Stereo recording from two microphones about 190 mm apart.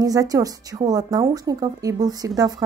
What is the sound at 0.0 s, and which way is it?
Speech, 20° right (ahead or behind).